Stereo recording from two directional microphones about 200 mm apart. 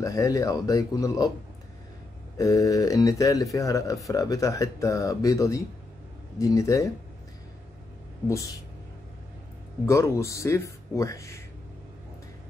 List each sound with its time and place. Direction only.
0.0 s speech: 15° left (ahead or behind)
2.3 s speech: 15° left (ahead or behind)
9.8 s speech: 15° left (ahead or behind)